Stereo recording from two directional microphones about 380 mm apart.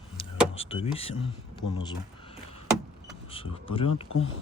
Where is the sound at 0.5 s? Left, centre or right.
Centre.